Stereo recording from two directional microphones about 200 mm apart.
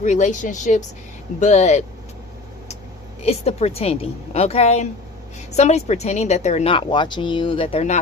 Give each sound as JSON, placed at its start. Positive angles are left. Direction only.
{"t": 0.0, "sound": "speech", "side_deg": 35}
{"t": 3.2, "sound": "speech", "side_deg": 30}